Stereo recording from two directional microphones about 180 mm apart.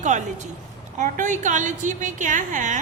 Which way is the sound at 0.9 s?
45° right (ahead or behind).